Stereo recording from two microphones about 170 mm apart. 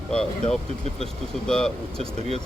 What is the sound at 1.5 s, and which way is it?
Speech, 5° left (ahead or behind).